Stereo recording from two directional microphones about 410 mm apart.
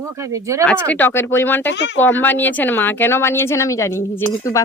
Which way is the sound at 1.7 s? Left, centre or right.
Left.